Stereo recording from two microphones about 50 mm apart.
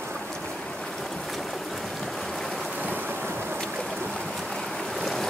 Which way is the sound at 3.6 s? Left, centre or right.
Centre.